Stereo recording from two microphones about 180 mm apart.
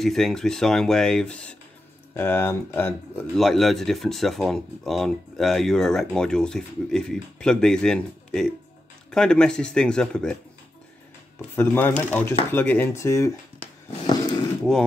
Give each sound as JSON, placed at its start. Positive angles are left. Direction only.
{"t": 0.0, "sound": "speech", "side_deg": 0}
{"t": 3.3, "sound": "speech", "side_deg": 0}
{"t": 11.5, "sound": "speech", "side_deg": 10}
{"t": 14.0, "sound": "a sound", "side_deg": 20}